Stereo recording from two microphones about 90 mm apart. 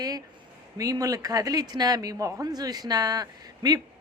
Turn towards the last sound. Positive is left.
turn(degrees=-45)  # may be behind; listen again after turning